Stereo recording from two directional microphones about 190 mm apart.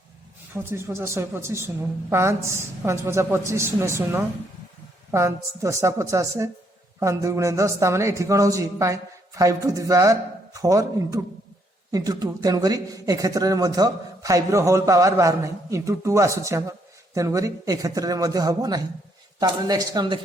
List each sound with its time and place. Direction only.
0.5 s a man's voice: 15° right (ahead or behind)